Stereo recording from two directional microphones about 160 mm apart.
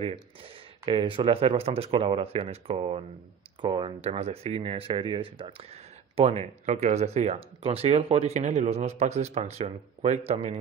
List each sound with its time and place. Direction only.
0.0 s speech: 35° right (ahead or behind)